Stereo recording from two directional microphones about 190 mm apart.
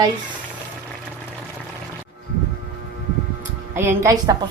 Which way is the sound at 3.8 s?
15° right (ahead or behind).